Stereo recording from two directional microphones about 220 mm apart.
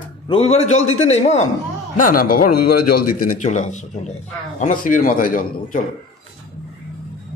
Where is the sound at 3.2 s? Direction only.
35° left (ahead or behind).